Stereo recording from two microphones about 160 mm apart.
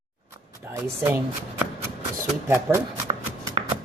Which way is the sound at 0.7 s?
15° right (ahead or behind).